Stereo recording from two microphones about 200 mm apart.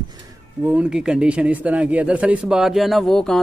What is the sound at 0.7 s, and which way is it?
A man's voice, 5° right (ahead or behind).